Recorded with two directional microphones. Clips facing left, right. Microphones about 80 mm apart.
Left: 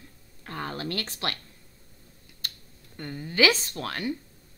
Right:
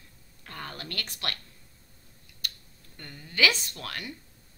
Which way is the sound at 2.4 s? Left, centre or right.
Left.